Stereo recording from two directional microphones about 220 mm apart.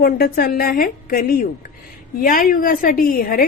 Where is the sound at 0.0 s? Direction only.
45° left (ahead or behind).